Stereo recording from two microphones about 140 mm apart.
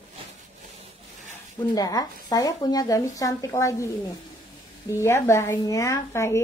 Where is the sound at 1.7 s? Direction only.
30° left (ahead or behind).